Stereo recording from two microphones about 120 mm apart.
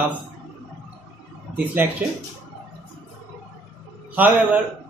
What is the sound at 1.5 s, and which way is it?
Speech, 15° right (ahead or behind).